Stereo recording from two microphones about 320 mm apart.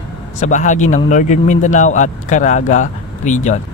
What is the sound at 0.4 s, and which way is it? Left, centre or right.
Speech, left.